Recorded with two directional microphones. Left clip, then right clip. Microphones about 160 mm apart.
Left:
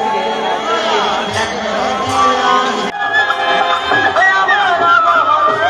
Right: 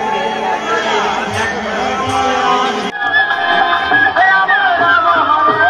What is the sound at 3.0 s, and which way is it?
Music, 50° left (ahead or behind).